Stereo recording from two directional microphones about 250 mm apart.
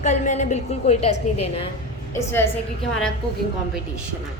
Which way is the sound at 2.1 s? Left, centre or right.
Centre.